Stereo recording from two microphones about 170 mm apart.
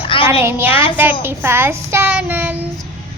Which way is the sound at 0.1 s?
30° left (ahead or behind).